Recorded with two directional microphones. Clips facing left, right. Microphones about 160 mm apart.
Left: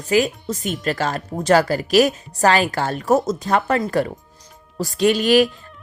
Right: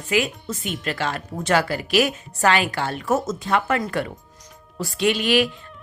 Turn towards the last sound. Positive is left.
turn(degrees=40)  # may be behind; listen again after turning